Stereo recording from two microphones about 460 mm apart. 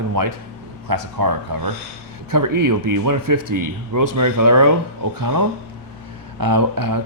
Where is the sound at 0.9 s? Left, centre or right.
Right.